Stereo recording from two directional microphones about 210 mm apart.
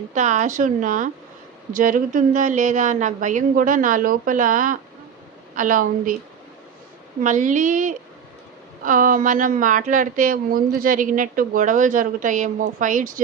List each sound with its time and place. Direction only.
0.1 s a woman's voice: 35° right (ahead or behind)
7.2 s a woman's voice: 40° right (ahead or behind)